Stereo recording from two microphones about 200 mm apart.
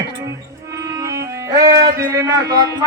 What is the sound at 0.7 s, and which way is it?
Music, 15° right (ahead or behind).